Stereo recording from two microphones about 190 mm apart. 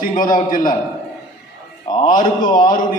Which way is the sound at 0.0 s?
45° left (ahead or behind).